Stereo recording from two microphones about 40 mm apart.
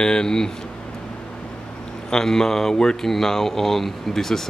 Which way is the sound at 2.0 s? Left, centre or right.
Centre.